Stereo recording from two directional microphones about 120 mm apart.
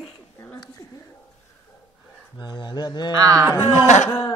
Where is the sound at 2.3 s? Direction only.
35° left (ahead or behind).